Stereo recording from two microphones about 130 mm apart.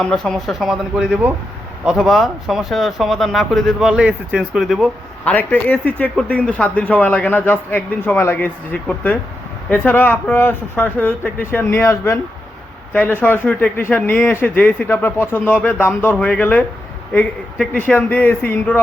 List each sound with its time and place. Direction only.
0.0 s speech: 5° left (ahead or behind)
5.2 s speech: 10° left (ahead or behind)